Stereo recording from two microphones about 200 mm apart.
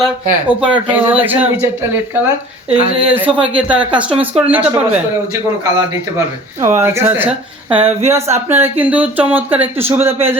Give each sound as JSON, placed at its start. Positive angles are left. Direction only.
{"t": 0.0, "sound": "speech", "side_deg": -5}
{"t": 2.6, "sound": "speech", "side_deg": -30}
{"t": 3.1, "sound": "speech", "side_deg": -10}
{"t": 7.7, "sound": "speech", "side_deg": -30}
{"t": 8.0, "sound": "speech", "side_deg": -15}